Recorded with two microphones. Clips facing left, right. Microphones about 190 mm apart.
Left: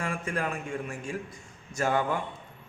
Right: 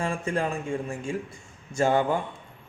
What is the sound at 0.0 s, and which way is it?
A man's voice, 25° right (ahead or behind).